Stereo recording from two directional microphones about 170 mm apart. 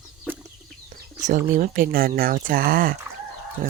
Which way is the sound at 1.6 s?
55° right (ahead or behind).